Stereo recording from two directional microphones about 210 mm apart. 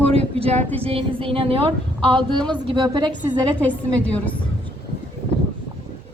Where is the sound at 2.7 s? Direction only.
20° right (ahead or behind).